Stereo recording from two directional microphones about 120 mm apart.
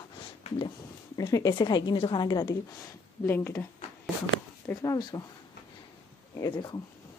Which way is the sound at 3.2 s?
20° left (ahead or behind).